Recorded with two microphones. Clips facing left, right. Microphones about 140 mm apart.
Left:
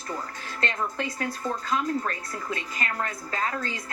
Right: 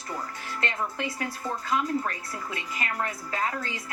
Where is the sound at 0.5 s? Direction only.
15° right (ahead or behind).